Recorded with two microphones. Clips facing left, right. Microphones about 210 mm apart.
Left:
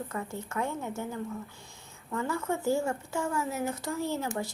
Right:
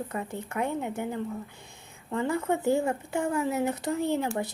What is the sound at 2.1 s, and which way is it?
Speech, 20° right (ahead or behind).